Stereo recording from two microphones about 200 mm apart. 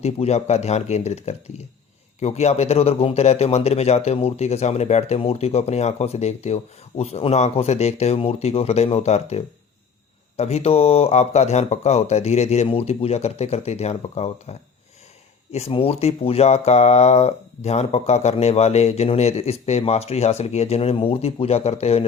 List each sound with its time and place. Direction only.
0.0 s speech: 30° left (ahead or behind)
15.5 s speech: 30° left (ahead or behind)